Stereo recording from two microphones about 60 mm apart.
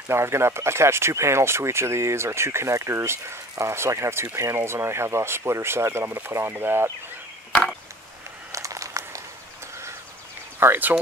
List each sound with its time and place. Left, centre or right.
0.1 s speech: right
8.5 s a sound: right
10.6 s speech: right